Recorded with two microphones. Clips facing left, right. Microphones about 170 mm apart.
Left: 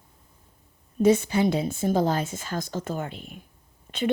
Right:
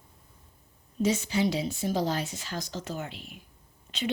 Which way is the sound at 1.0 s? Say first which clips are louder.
Left 6 dB; 55° left (ahead or behind).